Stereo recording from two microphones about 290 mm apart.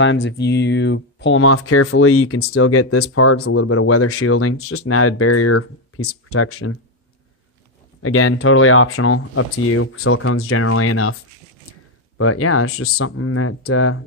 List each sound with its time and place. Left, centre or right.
0.0 s speech: left
8.0 s speech: left
12.2 s speech: left